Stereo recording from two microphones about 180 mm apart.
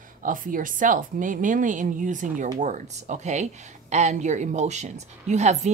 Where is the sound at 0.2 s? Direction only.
50° right (ahead or behind).